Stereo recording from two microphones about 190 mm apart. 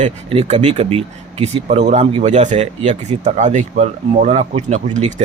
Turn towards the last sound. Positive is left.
turn(degrees=-40)  # may be behind; listen again after turning